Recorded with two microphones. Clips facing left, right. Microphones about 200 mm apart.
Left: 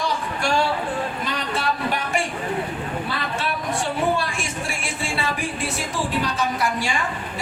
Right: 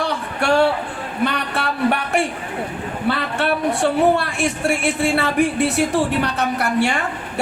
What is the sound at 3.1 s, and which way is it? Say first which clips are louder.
Speech: right 7 dB; 65° right (ahead or behind).